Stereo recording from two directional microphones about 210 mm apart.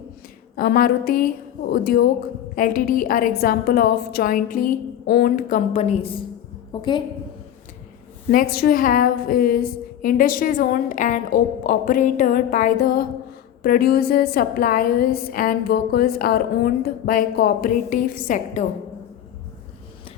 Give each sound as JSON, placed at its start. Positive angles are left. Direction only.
{"t": 0.5, "sound": "a woman's voice", "side_deg": 45}
{"t": 8.3, "sound": "a woman's voice", "side_deg": 45}